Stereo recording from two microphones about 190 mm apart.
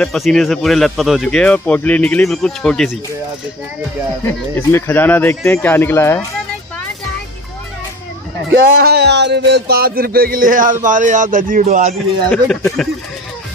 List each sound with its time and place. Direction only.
0.0 s speech: centre (ahead or behind)
4.6 s speech: 15° left (ahead or behind)
8.5 s music: 55° right (ahead or behind)
12.3 s speech: 5° left (ahead or behind)